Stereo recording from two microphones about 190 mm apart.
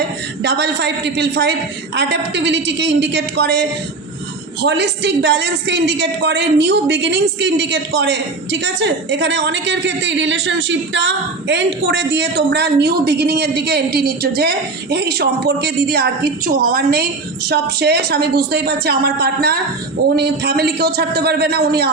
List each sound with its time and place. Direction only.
0.4 s a woman's voice: 65° right (ahead or behind)